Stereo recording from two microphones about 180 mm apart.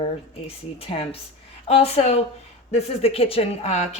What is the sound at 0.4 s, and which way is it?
Speech, 30° left (ahead or behind).